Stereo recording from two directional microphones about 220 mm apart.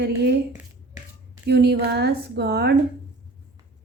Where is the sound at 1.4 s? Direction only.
45° right (ahead or behind).